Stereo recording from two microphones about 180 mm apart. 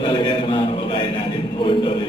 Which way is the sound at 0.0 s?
25° left (ahead or behind).